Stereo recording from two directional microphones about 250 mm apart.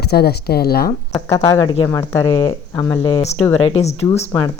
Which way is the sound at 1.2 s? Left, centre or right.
Centre.